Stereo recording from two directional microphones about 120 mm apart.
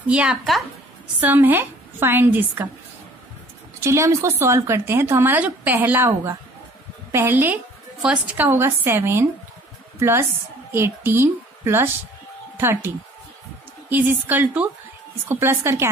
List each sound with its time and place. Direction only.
0.1 s a woman's voice: 10° right (ahead or behind)
3.8 s a woman's voice: 25° right (ahead or behind)